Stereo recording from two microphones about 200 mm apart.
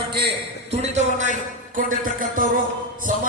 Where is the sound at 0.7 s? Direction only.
35° right (ahead or behind).